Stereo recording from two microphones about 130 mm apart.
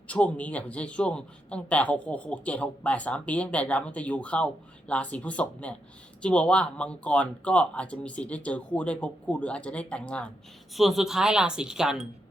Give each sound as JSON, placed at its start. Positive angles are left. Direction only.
{"t": 0.1, "sound": "a man's voice", "side_deg": 10}